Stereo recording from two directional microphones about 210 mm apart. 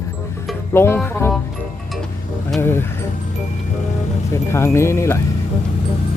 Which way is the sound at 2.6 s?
10° left (ahead or behind).